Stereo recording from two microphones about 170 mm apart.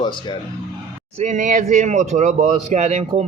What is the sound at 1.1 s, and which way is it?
A man's voice, 45° right (ahead or behind).